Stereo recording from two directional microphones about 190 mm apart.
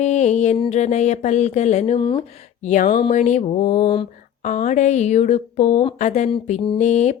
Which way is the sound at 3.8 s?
25° left (ahead or behind).